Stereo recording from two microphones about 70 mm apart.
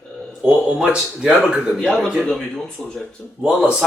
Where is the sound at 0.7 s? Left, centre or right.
Centre.